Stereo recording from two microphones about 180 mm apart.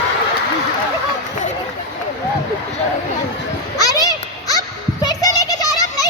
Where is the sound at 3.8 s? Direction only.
20° left (ahead or behind).